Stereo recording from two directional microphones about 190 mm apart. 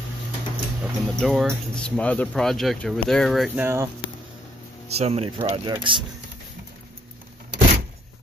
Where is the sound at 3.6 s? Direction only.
15° right (ahead or behind).